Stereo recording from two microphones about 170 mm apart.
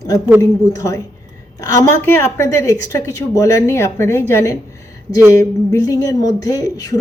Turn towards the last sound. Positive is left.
turn(degrees=20)  # may be behind; listen again after turning